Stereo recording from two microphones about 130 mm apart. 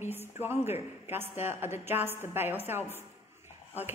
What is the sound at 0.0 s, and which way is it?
A woman's voice, 15° right (ahead or behind).